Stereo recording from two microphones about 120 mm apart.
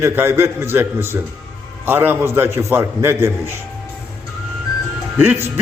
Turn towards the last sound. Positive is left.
turn(degrees=-15)  # may be behind; listen again after turning